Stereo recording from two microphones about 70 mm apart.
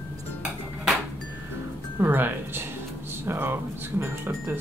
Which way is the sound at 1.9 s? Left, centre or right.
Right.